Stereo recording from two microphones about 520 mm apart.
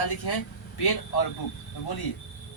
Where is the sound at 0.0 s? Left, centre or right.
Left.